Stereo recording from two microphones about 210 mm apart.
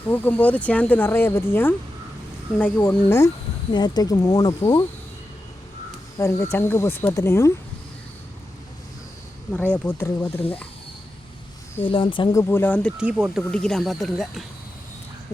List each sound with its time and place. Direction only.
0.1 s speech: 10° left (ahead or behind)
6.1 s speech: 15° left (ahead or behind)
9.7 s speech: 10° left (ahead or behind)
11.9 s speech: 25° left (ahead or behind); by 12.9 s 5° left (ahead or behind)
13.0 s speech: 5° right (ahead or behind)